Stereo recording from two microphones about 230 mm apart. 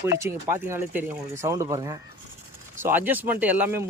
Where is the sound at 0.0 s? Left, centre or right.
Centre.